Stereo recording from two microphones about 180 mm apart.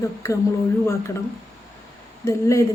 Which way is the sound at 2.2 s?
15° left (ahead or behind).